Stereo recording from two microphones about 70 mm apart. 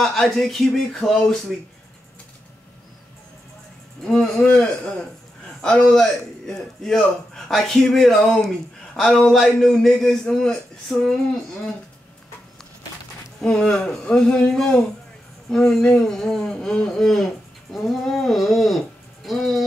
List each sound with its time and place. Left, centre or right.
0.0 s a man's voice: centre
4.0 s a man's voice: centre
4.5 s a man's voice: centre
13.4 s a man's voice: centre